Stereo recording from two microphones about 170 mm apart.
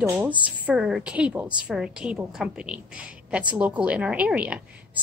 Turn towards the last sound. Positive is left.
turn(degrees=-10)  # may be behind; listen again after turning